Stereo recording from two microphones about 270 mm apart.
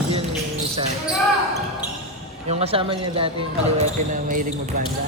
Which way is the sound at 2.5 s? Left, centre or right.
Right.